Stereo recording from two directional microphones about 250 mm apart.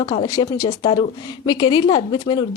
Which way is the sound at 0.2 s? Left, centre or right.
Centre.